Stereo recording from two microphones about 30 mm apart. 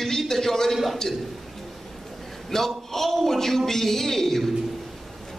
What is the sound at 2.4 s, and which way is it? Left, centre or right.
A man's voice, centre.